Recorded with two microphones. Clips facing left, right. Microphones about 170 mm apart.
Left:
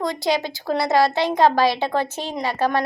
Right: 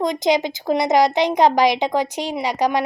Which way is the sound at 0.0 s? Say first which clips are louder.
Right 4 dB; 20° right (ahead or behind).